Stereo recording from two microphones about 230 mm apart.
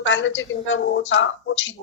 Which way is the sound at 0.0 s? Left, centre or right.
Left.